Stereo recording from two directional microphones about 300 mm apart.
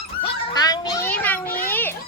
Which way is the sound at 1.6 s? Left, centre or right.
Centre.